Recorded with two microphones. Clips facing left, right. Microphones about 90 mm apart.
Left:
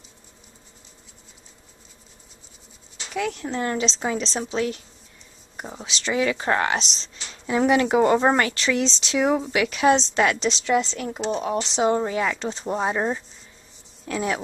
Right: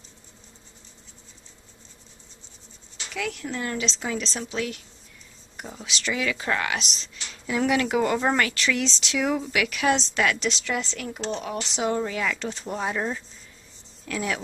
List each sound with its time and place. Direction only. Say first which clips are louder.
3.1 s speech: left 4 dB; 30° left (ahead or behind)
11.1 s speech: left 5 dB; 5° left (ahead or behind)
11.4 s speech: left 7 dB; 25° left (ahead or behind)